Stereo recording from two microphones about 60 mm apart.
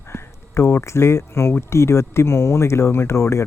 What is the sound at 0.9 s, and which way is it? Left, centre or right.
Speech, left.